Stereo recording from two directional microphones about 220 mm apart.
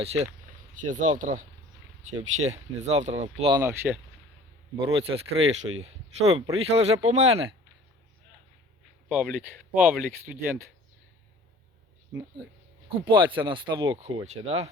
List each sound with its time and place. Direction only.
0.0 s speech: 30° right (ahead or behind)
3.6 s speech: 10° right (ahead or behind)
4.8 s speech: 25° right (ahead or behind)
9.0 s speech: 5° right (ahead or behind)
13.1 s speech: 20° right (ahead or behind)